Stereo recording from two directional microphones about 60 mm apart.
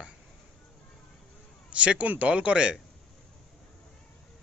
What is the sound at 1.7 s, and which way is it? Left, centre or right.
Speech, right.